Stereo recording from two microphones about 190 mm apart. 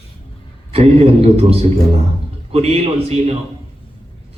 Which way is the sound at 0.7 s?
30° right (ahead or behind).